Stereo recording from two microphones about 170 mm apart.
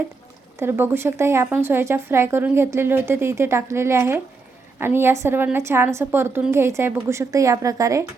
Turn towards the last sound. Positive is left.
turn(degrees=-20)  # may be behind; listen again after turning